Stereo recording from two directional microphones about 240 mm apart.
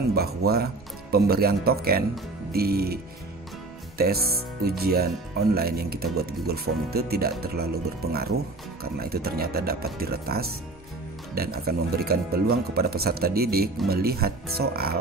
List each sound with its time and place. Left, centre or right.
0.1 s speech: right
4.0 s speech: right
9.0 s speech: right